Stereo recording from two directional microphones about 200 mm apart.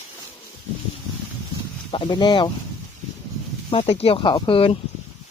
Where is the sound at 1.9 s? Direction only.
25° left (ahead or behind).